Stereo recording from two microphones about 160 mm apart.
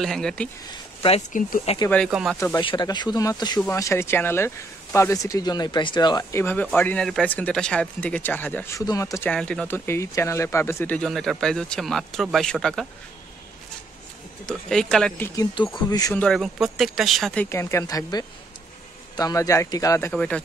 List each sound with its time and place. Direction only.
0.0 s speech: 5° left (ahead or behind)
1.3 s speech: 55° left (ahead or behind)
2.0 s speech: 5° right (ahead or behind)
2.6 s speech: 30° left (ahead or behind)
6.4 s speech: 10° left (ahead or behind)
9.3 s speech: 5° left (ahead or behind)
14.4 s speech: 5° left (ahead or behind)
15.3 s speech: 30° left (ahead or behind)
16.2 s speech: centre (ahead or behind)
17.5 s speech: 15° left (ahead or behind)
20.1 s speech: 5° left (ahead or behind)